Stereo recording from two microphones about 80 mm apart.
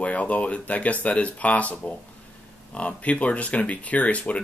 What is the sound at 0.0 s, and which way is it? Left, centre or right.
Speech, centre.